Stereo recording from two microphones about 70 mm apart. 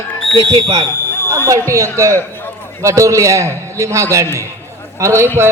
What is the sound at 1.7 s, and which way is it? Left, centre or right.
A man's voice, right.